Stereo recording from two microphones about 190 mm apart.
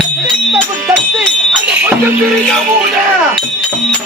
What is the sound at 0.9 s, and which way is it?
Music, centre (ahead or behind).